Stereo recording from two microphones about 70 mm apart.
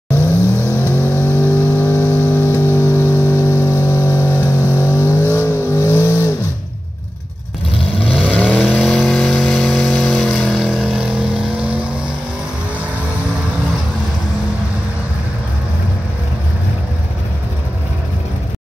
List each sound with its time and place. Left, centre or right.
0.7 s vehicle: left
8.3 s vehicle: centre
8.7 s vehicle: centre